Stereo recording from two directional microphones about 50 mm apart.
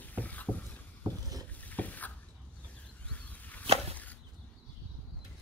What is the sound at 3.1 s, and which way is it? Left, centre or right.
Chop, left.